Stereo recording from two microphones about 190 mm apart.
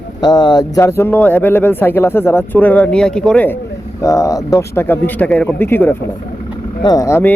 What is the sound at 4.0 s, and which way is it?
Speech, 15° left (ahead or behind).